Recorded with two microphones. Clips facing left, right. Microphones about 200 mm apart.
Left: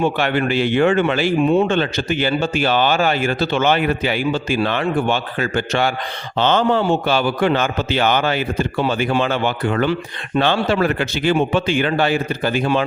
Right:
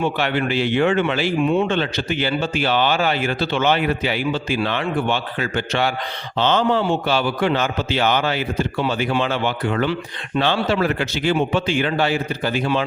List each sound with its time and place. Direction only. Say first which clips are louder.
0.0 s speech: left 3 dB; 50° left (ahead or behind)